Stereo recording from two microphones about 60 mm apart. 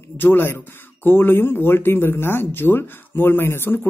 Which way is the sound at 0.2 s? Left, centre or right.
Left.